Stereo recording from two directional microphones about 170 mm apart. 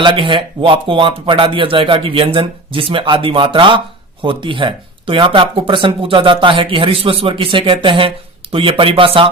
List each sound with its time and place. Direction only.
0.0 s speech: 30° right (ahead or behind)